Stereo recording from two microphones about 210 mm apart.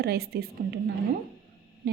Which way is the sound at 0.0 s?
50° right (ahead or behind).